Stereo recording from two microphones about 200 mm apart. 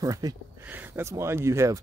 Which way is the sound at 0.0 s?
20° right (ahead or behind).